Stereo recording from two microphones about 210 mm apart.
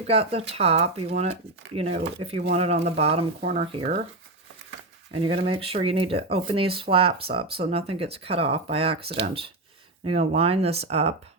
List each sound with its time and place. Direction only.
0.1 s speech: 30° right (ahead or behind)
5.1 s speech: 25° right (ahead or behind)